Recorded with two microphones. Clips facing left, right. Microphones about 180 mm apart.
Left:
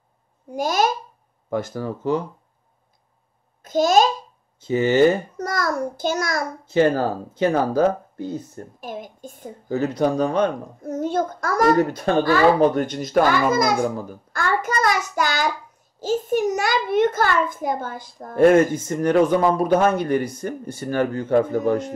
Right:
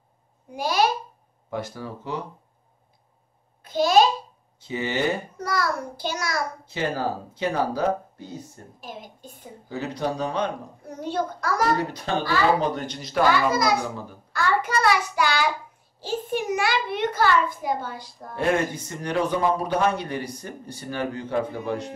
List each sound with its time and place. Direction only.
0.5 s a woman's voice: 45° left (ahead or behind)
3.6 s a woman's voice: 45° left (ahead or behind)